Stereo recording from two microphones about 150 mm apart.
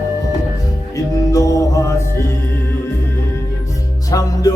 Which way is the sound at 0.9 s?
20° left (ahead or behind).